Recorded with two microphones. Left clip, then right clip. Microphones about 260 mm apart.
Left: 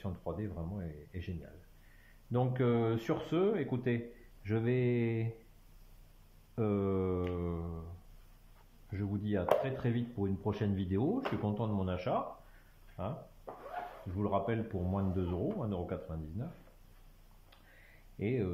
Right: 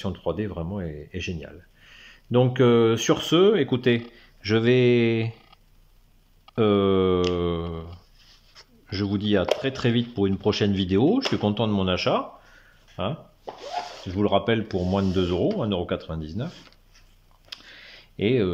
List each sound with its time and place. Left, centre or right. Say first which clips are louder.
0.0 s speech: right 13 dB; right
2.3 s speech: right 14 dB; right
6.5 s speech: right 14 dB; right
8.9 s speech: right 14 dB; right
18.2 s speech: right 13 dB; right